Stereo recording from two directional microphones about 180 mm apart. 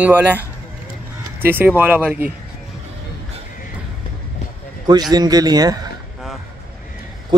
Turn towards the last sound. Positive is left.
turn(degrees=-20)  # may be behind; listen again after turning